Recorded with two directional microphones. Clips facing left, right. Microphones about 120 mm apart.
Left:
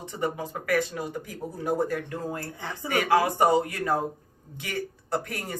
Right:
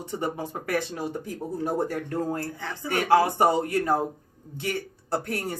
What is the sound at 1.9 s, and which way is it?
Speech, 40° right (ahead or behind).